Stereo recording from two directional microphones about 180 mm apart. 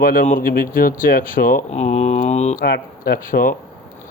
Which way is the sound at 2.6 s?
60° left (ahead or behind).